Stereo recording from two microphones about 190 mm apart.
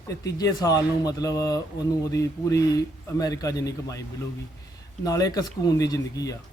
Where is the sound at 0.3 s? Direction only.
20° left (ahead or behind).